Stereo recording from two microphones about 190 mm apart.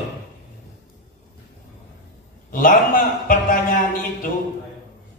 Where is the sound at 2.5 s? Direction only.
45° left (ahead or behind).